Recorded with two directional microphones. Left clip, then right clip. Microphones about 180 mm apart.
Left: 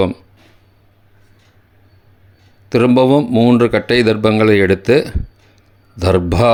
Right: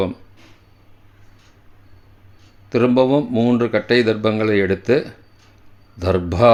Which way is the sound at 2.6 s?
35° left (ahead or behind).